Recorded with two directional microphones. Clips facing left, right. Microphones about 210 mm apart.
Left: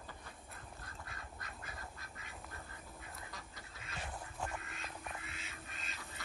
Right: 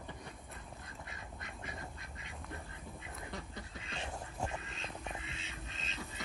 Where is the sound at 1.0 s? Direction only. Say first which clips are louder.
Right 2 dB; 20° right (ahead or behind).